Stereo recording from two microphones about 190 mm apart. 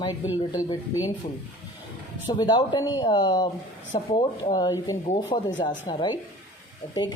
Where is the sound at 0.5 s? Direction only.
20° left (ahead or behind).